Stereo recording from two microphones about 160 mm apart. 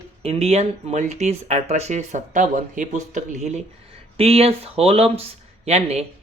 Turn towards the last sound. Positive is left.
turn(degrees=-40)  # may be behind; listen again after turning